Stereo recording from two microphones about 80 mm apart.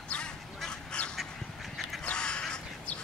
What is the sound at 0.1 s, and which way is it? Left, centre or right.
Duck, centre.